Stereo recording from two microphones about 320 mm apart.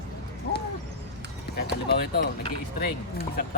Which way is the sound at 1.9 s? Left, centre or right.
Left.